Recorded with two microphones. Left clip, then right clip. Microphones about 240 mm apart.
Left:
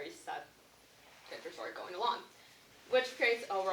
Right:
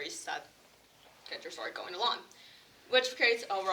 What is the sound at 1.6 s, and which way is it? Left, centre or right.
Speech, right.